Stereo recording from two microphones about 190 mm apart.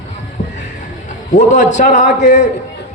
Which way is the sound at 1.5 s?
40° left (ahead or behind).